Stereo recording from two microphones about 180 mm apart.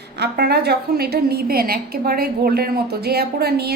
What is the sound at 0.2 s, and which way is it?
A woman's voice, 65° right (ahead or behind).